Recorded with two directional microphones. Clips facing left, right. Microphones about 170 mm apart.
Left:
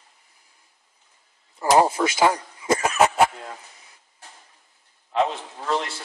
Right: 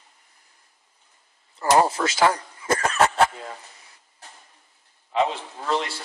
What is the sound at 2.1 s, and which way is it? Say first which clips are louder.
Speech: right 2 dB; 20° left (ahead or behind).